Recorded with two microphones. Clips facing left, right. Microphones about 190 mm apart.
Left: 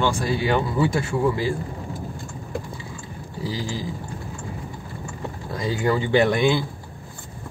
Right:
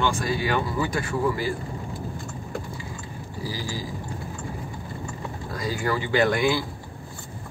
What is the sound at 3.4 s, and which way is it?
Speech, 25° left (ahead or behind).